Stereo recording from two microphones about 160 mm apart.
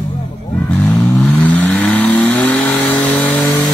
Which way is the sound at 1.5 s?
5° left (ahead or behind).